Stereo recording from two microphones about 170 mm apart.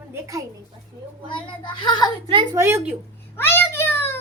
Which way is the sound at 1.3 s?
30° left (ahead or behind).